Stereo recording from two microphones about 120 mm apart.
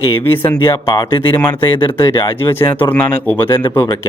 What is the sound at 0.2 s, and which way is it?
Speech, 15° left (ahead or behind).